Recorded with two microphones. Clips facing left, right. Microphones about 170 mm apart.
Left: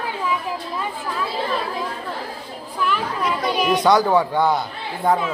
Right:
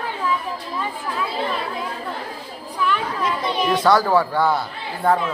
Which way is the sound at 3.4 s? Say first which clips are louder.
Left 1 dB; 10° left (ahead or behind).